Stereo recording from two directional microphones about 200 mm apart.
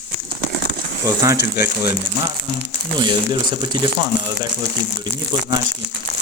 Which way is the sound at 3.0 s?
25° right (ahead or behind).